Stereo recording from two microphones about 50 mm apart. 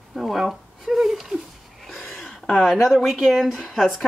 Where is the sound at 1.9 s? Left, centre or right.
Centre.